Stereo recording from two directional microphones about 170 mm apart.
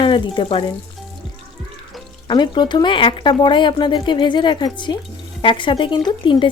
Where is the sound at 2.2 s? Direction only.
25° left (ahead or behind).